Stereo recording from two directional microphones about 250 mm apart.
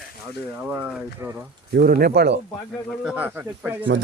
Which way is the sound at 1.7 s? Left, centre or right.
Right.